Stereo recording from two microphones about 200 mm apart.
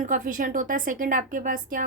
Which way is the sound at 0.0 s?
40° right (ahead or behind).